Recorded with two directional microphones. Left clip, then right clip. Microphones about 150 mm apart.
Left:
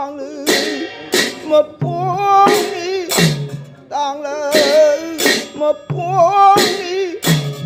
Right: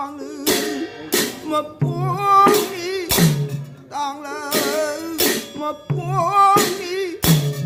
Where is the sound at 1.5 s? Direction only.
10° right (ahead or behind).